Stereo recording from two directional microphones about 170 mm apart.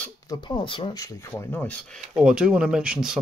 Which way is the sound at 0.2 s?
25° left (ahead or behind).